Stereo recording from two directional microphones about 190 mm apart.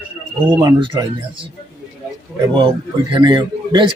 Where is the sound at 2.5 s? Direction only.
25° right (ahead or behind).